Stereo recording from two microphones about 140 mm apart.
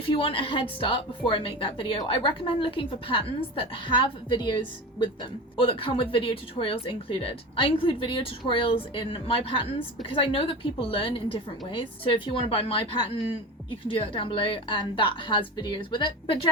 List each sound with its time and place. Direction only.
0.0 s a woman's voice: 40° left (ahead or behind)